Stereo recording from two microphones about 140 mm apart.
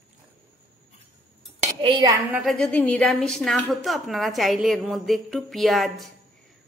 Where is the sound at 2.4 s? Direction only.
5° left (ahead or behind).